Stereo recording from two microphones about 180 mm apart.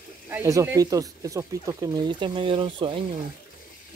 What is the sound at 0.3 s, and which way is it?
Speech, 15° right (ahead or behind).